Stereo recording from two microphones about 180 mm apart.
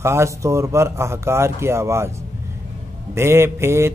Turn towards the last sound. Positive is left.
turn(degrees=-15)  # may be behind; listen again after turning